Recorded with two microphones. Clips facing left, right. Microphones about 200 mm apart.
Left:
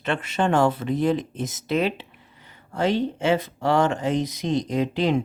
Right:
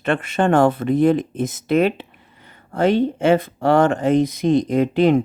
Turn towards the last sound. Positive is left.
turn(degrees=-55)  # may be behind; listen again after turning